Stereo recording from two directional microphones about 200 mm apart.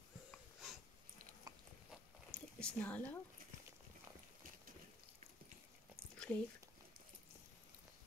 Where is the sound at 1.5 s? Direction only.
20° right (ahead or behind).